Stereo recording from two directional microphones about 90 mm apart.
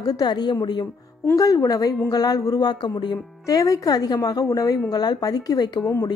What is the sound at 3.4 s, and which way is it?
A woman's voice, 40° left (ahead or behind).